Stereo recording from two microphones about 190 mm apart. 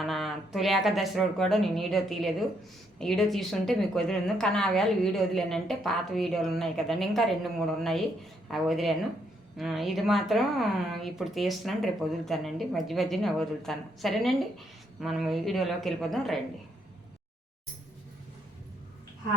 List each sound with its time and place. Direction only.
0.0 s a woman's voice: centre (ahead or behind)